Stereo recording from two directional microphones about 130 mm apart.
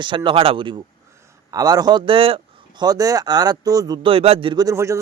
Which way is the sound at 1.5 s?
30° right (ahead or behind).